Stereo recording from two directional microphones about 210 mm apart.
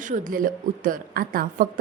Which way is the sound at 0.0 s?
40° right (ahead or behind).